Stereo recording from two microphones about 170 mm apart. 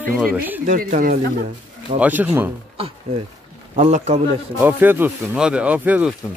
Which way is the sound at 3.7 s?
45° right (ahead or behind).